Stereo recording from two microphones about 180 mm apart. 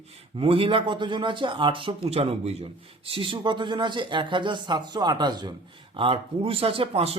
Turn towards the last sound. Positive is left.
turn(degrees=-35)  # may be behind; listen again after turning